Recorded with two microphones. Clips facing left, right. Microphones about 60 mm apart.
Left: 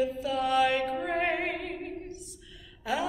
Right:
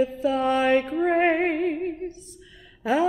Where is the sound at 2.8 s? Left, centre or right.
Right.